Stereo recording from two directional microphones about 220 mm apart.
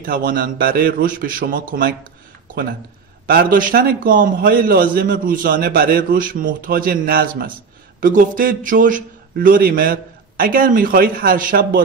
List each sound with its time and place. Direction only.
0.0 s a man's voice: 40° right (ahead or behind)
3.3 s a man's voice: 40° right (ahead or behind)